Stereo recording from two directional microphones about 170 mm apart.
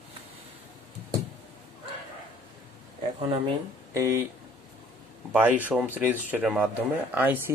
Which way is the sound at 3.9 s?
20° right (ahead or behind).